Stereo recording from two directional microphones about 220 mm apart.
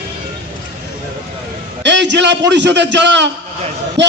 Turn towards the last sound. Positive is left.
turn(degrees=-55)  # may be behind; listen again after turning